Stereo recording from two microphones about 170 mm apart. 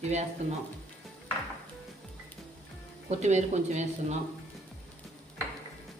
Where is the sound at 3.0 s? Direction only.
45° right (ahead or behind).